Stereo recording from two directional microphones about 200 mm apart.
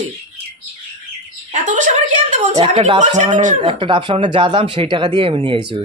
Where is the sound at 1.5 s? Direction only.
40° right (ahead or behind).